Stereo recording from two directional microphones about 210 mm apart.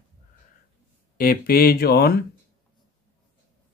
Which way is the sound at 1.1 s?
45° left (ahead or behind).